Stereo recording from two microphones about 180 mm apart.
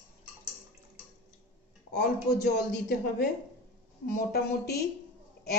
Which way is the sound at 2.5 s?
65° left (ahead or behind).